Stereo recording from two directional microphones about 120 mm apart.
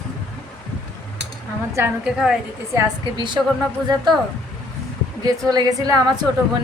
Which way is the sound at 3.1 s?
40° right (ahead or behind).